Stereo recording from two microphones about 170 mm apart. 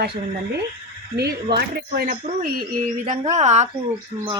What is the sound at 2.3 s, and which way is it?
A woman's voice, 55° right (ahead or behind).